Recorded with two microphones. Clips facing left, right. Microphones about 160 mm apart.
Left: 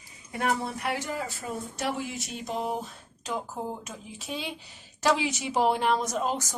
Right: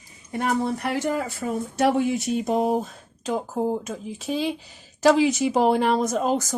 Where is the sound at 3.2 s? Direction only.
40° right (ahead or behind).